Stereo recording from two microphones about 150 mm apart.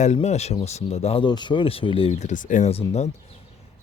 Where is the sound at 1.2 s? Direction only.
30° left (ahead or behind).